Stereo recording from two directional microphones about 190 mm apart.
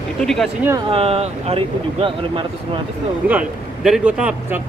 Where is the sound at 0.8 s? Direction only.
30° right (ahead or behind).